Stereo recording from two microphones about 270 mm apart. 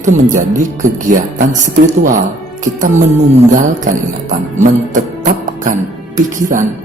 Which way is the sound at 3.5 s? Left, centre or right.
Right.